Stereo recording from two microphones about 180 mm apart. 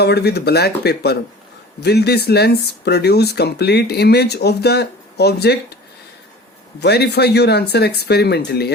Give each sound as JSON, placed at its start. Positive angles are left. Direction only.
{"t": 0.0, "sound": "speech", "side_deg": 65}
{"t": 6.7, "sound": "speech", "side_deg": 65}